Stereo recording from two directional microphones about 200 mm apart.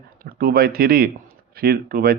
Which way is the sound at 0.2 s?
45° right (ahead or behind).